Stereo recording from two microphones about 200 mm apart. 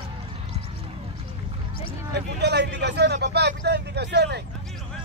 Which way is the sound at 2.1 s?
60° right (ahead or behind).